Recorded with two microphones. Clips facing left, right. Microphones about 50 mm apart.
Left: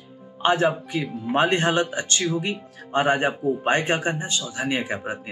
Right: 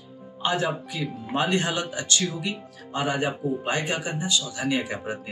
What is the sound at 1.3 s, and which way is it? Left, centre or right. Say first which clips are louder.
A man's voice: left 5 dB; left.